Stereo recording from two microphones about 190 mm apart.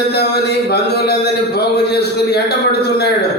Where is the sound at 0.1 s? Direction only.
60° left (ahead or behind).